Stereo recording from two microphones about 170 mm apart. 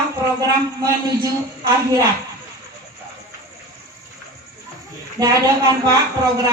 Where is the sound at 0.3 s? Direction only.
20° right (ahead or behind).